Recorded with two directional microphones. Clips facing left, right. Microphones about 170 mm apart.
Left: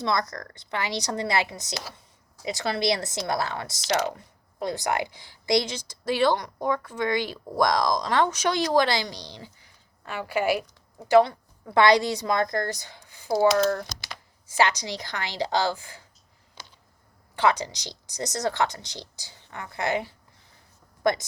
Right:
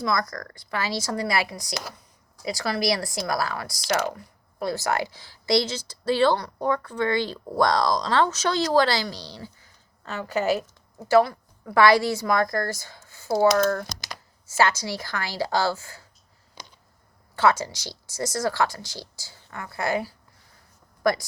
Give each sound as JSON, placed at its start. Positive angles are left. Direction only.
{"t": 0.0, "sound": "speech", "side_deg": 25}
{"t": 11.1, "sound": "a woman's voice", "side_deg": 20}
{"t": 13.4, "sound": "speech", "side_deg": -50}
{"t": 14.5, "sound": "speech", "side_deg": 15}
{"t": 16.6, "sound": "a sound", "side_deg": -15}
{"t": 17.3, "sound": "speech", "side_deg": 15}